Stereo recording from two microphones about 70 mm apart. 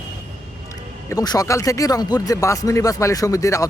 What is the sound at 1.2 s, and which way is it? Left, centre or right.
Speech, left.